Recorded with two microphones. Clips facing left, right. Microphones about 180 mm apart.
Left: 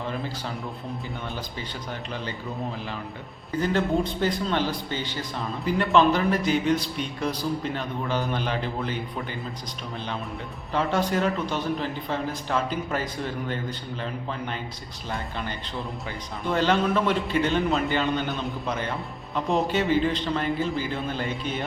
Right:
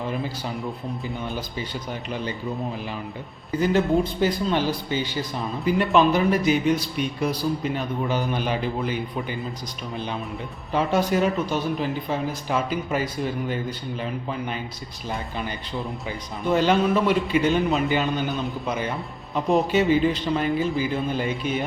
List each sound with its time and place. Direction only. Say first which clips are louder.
0.6 s speech: right 4 dB; centre (ahead or behind)
3.6 s a man's voice: right 3 dB; 10° right (ahead or behind)
10.7 s a man's voice: right 3 dB; 15° right (ahead or behind)
16.0 s a man's voice: right 6 dB; 10° right (ahead or behind)